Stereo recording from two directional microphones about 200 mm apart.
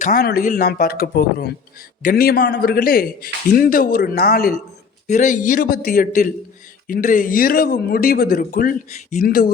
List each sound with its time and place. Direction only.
0.0 s speech: 45° left (ahead or behind)
5.0 s speech: 35° left (ahead or behind)